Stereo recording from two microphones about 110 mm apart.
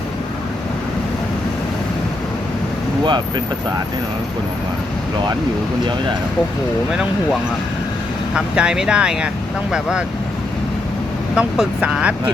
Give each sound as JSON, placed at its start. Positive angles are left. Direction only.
{"t": 3.0, "sound": "speech", "side_deg": -40}
{"t": 8.4, "sound": "speech", "side_deg": -10}
{"t": 11.3, "sound": "speech", "side_deg": -5}